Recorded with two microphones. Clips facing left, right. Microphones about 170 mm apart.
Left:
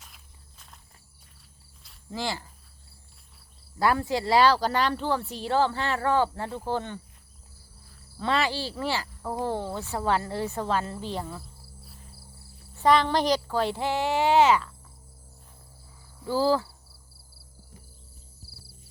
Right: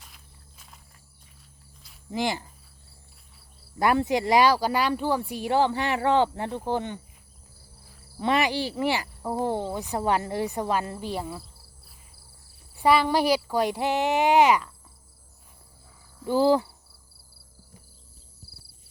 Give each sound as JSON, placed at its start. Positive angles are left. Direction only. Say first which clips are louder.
{"t": 0.0, "sound": "cricket", "louder": "right 1 dB", "side_deg": 0}
{"t": 2.0, "sound": "speech", "louder": "right 4 dB", "side_deg": -15}
{"t": 3.8, "sound": "speech", "louder": "right 2 dB", "side_deg": -20}
{"t": 8.2, "sound": "speech", "louder": "right 3 dB", "side_deg": -15}
{"t": 11.8, "sound": "cricket", "louder": "left 7 dB", "side_deg": -5}
{"t": 12.7, "sound": "speech", "louder": "right 1 dB", "side_deg": -10}
{"t": 16.2, "sound": "speech", "louder": "right 3 dB", "side_deg": -20}